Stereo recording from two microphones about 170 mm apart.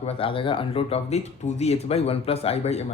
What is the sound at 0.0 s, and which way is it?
Speech, 35° left (ahead or behind).